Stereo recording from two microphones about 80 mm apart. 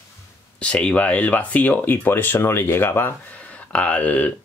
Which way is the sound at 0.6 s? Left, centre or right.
Centre.